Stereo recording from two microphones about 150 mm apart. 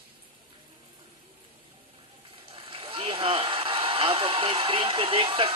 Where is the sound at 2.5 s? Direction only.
35° right (ahead or behind).